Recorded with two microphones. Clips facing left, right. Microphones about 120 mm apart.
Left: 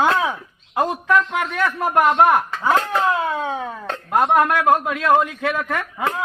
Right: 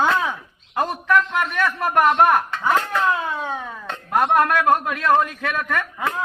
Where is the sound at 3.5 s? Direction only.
45° left (ahead or behind).